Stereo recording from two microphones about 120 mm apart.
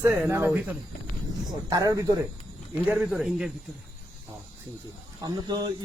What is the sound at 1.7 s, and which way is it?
Speech, 30° right (ahead or behind).